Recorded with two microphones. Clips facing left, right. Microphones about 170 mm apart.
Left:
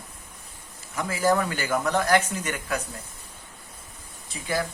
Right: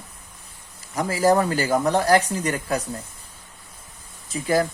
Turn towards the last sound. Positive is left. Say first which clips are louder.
# right 7 dB
turn(degrees=-45)  # may be behind; listen again after turning